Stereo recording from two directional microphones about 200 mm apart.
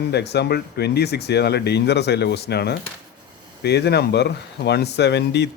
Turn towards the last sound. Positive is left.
turn(degrees=60)  # may be behind; listen again after turning